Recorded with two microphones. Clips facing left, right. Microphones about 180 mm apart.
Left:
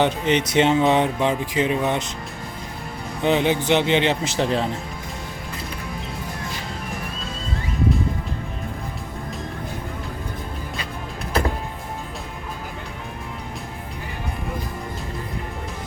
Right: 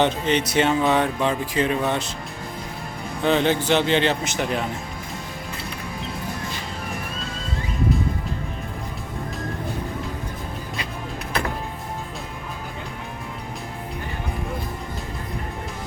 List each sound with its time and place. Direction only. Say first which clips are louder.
0.0 s speech: left 1 dB; 20° left (ahead or behind)
3.2 s speech: left 1 dB; 15° left (ahead or behind)
4.2 s speech: left 3 dB; 30° left (ahead or behind)